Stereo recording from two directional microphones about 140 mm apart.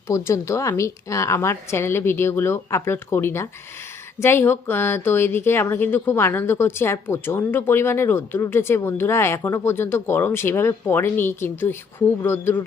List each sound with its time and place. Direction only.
0.1 s a woman's voice: 20° left (ahead or behind)